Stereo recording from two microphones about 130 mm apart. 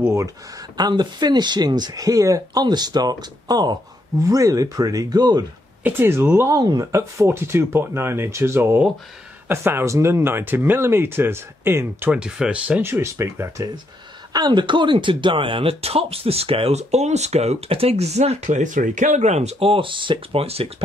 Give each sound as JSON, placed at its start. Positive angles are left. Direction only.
{"t": 0.0, "sound": "speech", "side_deg": -20}
{"t": 5.9, "sound": "speech", "side_deg": -15}
{"t": 12.2, "sound": "speech", "side_deg": -5}
{"t": 14.3, "sound": "speech", "side_deg": -35}